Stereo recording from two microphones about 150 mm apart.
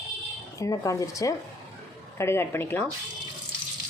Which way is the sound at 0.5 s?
20° left (ahead or behind).